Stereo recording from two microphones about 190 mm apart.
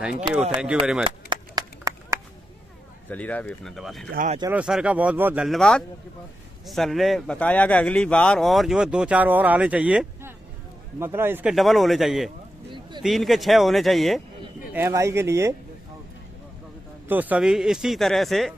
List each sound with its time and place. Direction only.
0.0 s speech: 5° right (ahead or behind)
1.0 s chop: 20° right (ahead or behind)
3.1 s speech: 10° left (ahead or behind); by 11.5 s 10° right (ahead or behind)
11.5 s speech: centre (ahead or behind)
14.7 s speech: 15° right (ahead or behind)
17.1 s speech: 10° right (ahead or behind)